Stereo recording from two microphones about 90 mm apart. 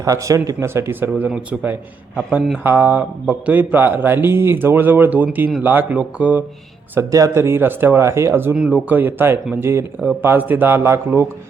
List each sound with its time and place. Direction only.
0.0 s speech: 35° right (ahead or behind); by 6.4 s 15° right (ahead or behind)
7.1 s speech: 35° right (ahead or behind)
8.5 s speech: 10° right (ahead or behind); by 11.3 s 30° right (ahead or behind)